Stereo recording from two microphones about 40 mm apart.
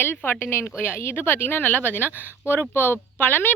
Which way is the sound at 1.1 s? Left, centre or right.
Left.